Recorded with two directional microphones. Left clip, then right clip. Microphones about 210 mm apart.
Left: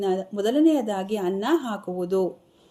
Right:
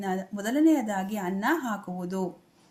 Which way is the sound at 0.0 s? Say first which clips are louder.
Left 7 dB; 45° left (ahead or behind).